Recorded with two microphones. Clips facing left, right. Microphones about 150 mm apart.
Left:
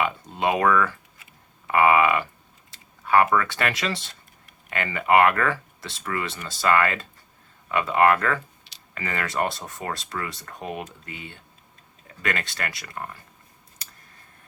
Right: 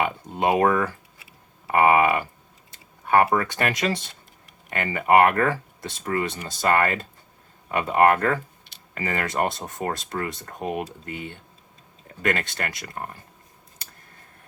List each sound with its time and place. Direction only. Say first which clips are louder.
0.0 s speech: right 1 dB; 45° right (ahead or behind)
2.7 s computer keyboard: even; 45° right (ahead or behind)
3.6 s speech: right 2 dB; 45° right (ahead or behind)